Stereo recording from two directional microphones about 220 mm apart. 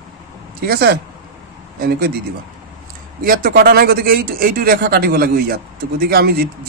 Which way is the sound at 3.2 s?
40° right (ahead or behind).